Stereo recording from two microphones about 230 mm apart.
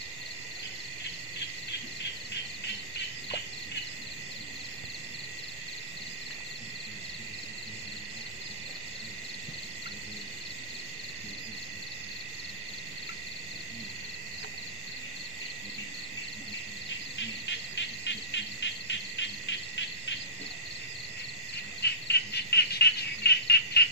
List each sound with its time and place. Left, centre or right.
17.7 s insect: left
21.8 s bird: left